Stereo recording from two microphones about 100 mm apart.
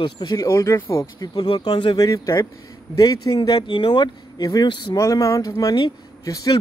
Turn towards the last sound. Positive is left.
turn(degrees=35)  # may be behind; listen again after turning